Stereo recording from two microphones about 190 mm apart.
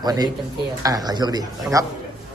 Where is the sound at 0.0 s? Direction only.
20° right (ahead or behind).